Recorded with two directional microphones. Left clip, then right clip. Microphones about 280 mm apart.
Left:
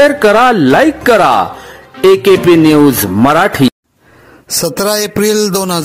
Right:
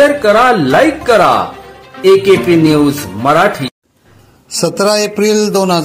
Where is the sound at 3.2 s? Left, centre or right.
Left.